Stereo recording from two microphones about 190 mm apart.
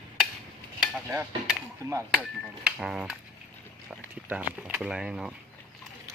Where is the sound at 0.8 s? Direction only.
5° right (ahead or behind).